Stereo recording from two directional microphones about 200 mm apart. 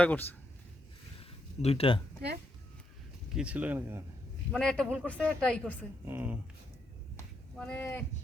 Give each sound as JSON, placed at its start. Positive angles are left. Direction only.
{"t": 0.0, "sound": "speech", "side_deg": 5}
{"t": 1.2, "sound": "a sound", "side_deg": 30}
{"t": 3.3, "sound": "speech", "side_deg": -5}
{"t": 4.5, "sound": "speech", "side_deg": 5}
{"t": 6.1, "sound": "speech", "side_deg": -10}
{"t": 7.6, "sound": "speech", "side_deg": 5}